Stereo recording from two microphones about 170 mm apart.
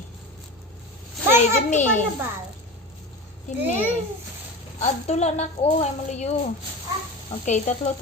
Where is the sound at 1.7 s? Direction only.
45° left (ahead or behind).